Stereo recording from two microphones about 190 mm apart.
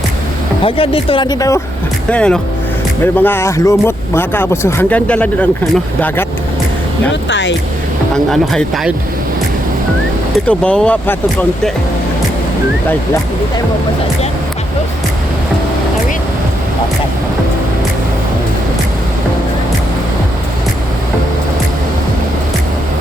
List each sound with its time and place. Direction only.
0.6 s speech: 30° left (ahead or behind)
2.0 s speech: 5° left (ahead or behind)
7.1 s speech: 70° left (ahead or behind)
8.1 s speech: centre (ahead or behind)
10.5 s speech: 5° left (ahead or behind)